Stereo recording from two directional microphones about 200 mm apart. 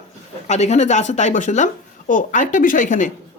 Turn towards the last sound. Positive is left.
turn(degrees=40)  # may be behind; listen again after turning